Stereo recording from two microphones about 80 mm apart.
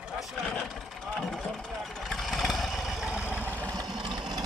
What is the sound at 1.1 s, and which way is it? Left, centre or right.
Vehicle, centre.